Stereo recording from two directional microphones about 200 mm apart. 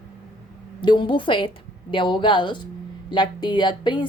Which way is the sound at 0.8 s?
25° left (ahead or behind).